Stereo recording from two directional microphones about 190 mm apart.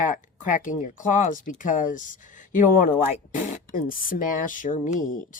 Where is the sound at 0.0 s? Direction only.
40° left (ahead or behind).